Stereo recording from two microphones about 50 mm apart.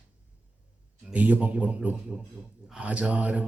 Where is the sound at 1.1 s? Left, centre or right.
Right.